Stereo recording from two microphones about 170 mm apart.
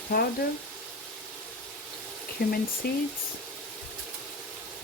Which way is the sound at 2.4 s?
70° left (ahead or behind).